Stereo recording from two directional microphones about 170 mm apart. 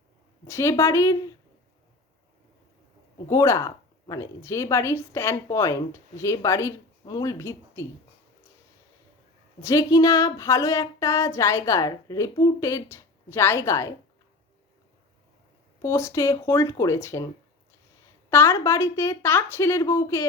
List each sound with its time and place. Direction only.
0.4 s speech: 15° left (ahead or behind)
3.2 s speech: 15° left (ahead or behind)
9.6 s speech: 20° left (ahead or behind)
15.8 s speech: 15° left (ahead or behind)
18.3 s speech: 15° left (ahead or behind)